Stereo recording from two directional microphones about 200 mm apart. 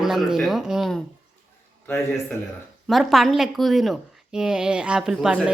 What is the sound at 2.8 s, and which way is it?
Speech, centre (ahead or behind).